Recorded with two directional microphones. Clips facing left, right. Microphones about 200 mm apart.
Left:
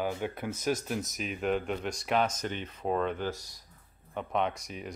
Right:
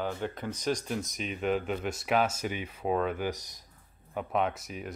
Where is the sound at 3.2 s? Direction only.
20° right (ahead or behind).